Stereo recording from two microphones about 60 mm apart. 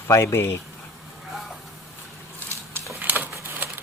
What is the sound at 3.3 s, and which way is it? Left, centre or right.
Crumpling, right.